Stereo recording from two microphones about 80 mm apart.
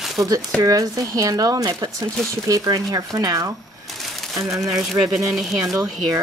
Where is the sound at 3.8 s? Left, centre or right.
Centre.